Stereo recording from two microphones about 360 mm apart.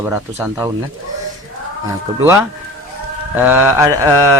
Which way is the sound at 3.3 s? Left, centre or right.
Centre.